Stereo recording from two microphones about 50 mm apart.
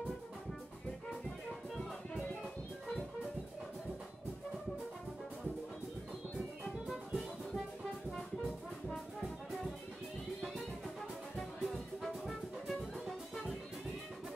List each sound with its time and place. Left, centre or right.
6.6 s music: centre
11.3 s music: centre